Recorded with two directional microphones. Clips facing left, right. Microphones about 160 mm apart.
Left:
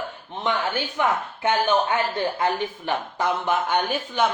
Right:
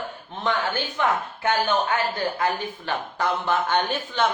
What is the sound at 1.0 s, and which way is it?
Speech, 20° left (ahead or behind).